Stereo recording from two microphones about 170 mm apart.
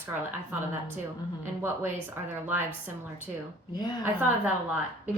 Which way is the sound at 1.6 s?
15° right (ahead or behind).